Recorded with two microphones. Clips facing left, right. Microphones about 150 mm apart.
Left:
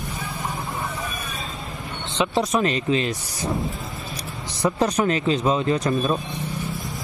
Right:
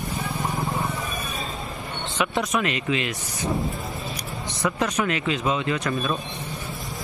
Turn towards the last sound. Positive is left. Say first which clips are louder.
# left 4 dB
turn(degrees=35)  # may be behind; listen again after turning